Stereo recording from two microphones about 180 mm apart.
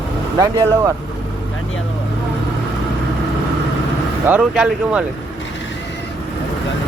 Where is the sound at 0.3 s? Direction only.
20° right (ahead or behind).